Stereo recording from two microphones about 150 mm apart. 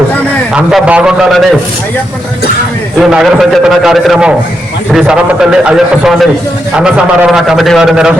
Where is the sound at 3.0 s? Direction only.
5° right (ahead or behind).